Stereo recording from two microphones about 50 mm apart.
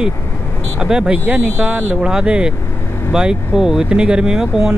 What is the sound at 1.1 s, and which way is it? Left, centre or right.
Speech, right.